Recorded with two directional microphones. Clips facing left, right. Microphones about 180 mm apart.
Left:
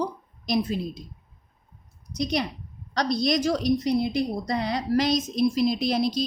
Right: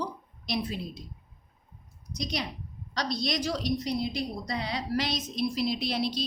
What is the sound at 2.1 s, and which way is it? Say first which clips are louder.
A woman's voice: left 7 dB; 55° left (ahead or behind).